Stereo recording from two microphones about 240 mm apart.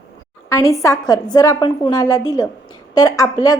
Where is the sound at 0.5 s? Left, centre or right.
Centre.